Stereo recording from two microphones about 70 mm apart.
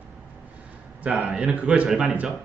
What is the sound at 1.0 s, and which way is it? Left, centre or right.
A man's voice, centre.